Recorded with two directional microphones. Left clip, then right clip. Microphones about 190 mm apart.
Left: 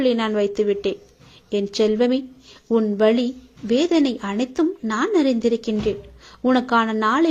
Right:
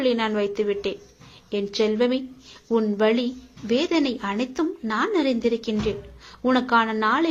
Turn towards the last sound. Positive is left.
turn(degrees=40)  # may be behind; listen again after turning